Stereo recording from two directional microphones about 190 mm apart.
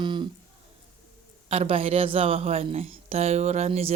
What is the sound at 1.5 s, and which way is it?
Speech, 30° right (ahead or behind).